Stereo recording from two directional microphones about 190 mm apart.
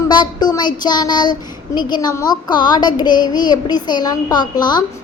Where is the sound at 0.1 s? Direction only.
25° left (ahead or behind).